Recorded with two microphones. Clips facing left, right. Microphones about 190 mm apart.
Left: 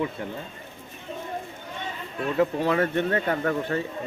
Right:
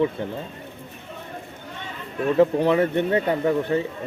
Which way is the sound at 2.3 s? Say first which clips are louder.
Right 5 dB; 25° right (ahead or behind).